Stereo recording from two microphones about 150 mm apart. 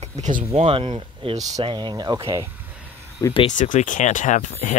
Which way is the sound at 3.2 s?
20° left (ahead or behind).